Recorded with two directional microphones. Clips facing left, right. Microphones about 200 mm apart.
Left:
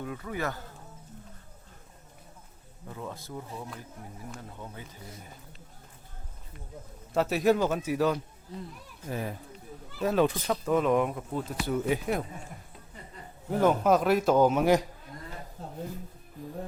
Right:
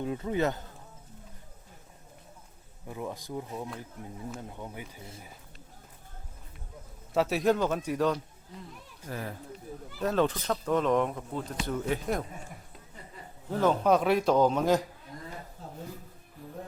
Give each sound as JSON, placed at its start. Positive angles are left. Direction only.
{"t": 0.0, "sound": "speech", "side_deg": -25}
{"t": 2.8, "sound": "speech", "side_deg": -15}
{"t": 7.1, "sound": "a man's voice", "side_deg": 0}
{"t": 9.0, "sound": "a man's voice", "side_deg": 15}
{"t": 13.5, "sound": "speech", "side_deg": 10}